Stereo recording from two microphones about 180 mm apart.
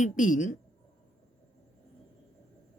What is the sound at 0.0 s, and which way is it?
Speech, 45° left (ahead or behind).